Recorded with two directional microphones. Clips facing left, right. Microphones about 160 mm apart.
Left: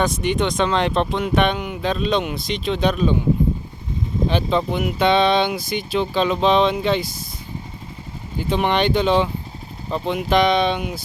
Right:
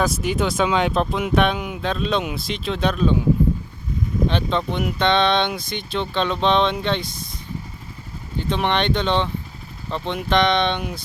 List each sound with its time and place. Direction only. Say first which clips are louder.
0.0 s speech: left 1 dB; 5° right (ahead or behind)
4.3 s speech: left 6 dB; 5° left (ahead or behind)
8.4 s speech: left 2 dB; 5° left (ahead or behind)